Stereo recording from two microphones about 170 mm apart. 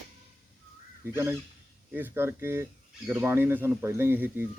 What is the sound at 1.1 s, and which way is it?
Speech, 15° right (ahead or behind).